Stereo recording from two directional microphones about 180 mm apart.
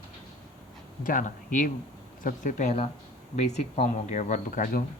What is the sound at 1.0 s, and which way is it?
Speech, 50° left (ahead or behind).